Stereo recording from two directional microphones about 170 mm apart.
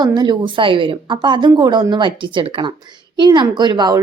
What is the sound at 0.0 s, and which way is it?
A woman's voice, 25° right (ahead or behind).